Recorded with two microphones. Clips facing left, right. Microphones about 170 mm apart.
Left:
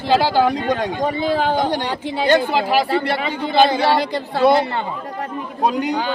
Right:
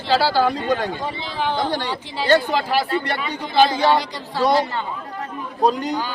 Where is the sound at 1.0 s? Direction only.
50° left (ahead or behind).